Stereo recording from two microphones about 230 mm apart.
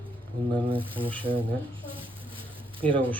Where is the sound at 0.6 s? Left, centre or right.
Right.